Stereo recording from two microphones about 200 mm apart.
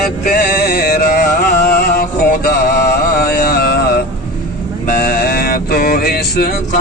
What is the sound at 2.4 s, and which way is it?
Mantra, 50° left (ahead or behind).